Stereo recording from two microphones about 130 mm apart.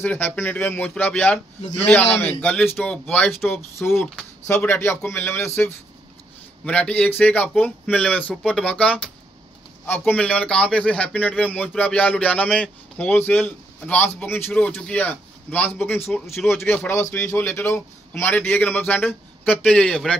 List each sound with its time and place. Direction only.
0.0 s a man's voice: 15° left (ahead or behind)
4.6 s a man's voice: 20° left (ahead or behind)